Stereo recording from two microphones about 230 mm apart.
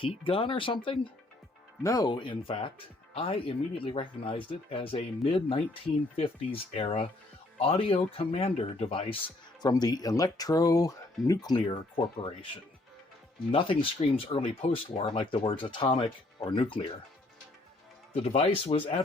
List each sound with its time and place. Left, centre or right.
0.0 s speech: left
13.5 s speech: left
18.2 s speech: left